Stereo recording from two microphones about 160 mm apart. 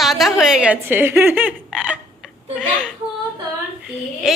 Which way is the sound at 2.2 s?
5° right (ahead or behind).